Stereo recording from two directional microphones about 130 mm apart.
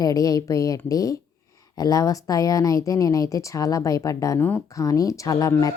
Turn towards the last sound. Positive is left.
turn(degrees=25)  # may be behind; listen again after turning